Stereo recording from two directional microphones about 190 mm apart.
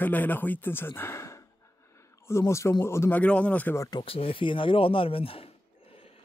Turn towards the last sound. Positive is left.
turn(degrees=30)  # may be behind; listen again after turning